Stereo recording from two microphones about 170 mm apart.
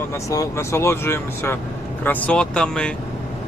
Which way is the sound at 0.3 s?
15° left (ahead or behind).